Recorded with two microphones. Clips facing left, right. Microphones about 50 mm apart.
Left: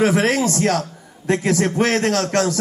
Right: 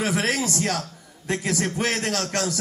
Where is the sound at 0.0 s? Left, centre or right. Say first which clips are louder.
Left 7 dB; left.